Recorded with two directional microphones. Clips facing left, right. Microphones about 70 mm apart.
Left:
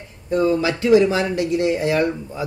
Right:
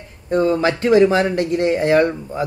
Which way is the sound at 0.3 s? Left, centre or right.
Right.